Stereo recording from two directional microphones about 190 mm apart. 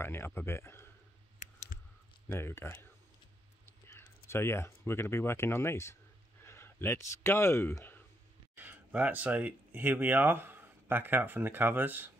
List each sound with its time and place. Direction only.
0.0 s speech: 10° left (ahead or behind)
1.7 s typing: 55° left (ahead or behind)
2.2 s speech: 10° left (ahead or behind)
3.6 s typing: 15° left (ahead or behind)
4.3 s speech: 15° left (ahead or behind)
8.5 s speech: 10° right (ahead or behind)